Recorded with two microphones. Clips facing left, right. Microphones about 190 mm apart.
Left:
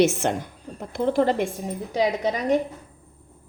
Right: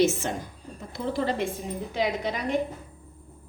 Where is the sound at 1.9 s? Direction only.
40° left (ahead or behind).